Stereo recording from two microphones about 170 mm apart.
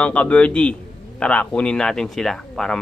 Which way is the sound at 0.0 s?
5° left (ahead or behind).